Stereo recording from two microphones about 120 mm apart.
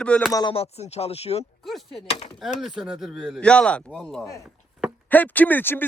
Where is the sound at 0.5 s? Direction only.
60° left (ahead or behind).